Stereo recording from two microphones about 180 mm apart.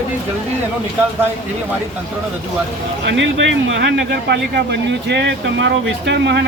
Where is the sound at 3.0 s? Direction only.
85° right.